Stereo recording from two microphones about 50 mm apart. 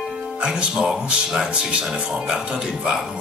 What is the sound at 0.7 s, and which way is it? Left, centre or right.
Speech, centre.